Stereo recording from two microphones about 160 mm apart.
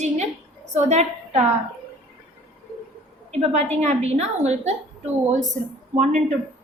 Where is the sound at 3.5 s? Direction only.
45° right (ahead or behind).